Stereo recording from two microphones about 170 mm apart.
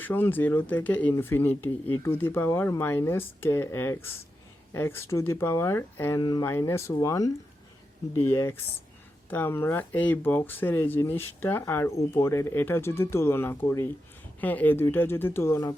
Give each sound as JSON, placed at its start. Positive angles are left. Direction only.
{"t": 0.0, "sound": "speech", "side_deg": 10}